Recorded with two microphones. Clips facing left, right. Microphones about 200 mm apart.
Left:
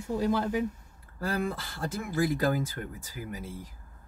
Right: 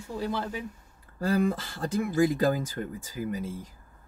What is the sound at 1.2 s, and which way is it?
Speech, 15° right (ahead or behind).